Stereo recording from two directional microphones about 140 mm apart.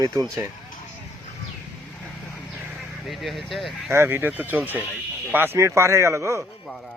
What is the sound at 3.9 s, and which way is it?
Speech, 20° right (ahead or behind).